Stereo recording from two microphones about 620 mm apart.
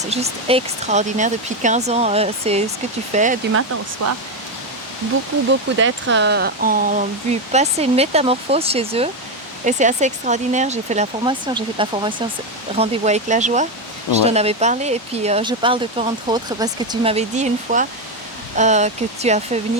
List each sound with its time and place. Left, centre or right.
0.0 s speech: centre
4.0 s speech: right
5.5 s speech: centre